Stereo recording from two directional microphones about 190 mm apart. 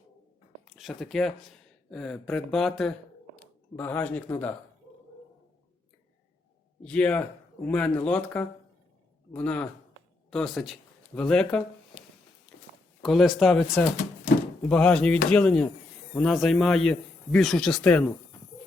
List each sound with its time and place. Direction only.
0.8 s speech: centre (ahead or behind)
6.8 s speech: 5° left (ahead or behind)
13.0 s speech: centre (ahead or behind)